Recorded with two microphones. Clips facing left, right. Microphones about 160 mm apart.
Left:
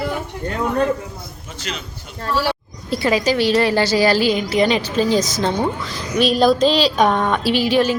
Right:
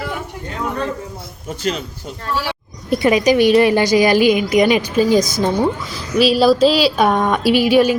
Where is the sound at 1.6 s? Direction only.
45° right (ahead or behind).